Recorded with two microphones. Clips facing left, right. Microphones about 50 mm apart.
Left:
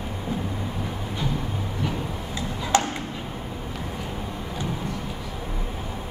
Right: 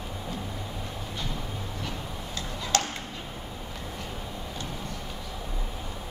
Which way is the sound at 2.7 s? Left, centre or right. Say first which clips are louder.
Left 6 dB; centre.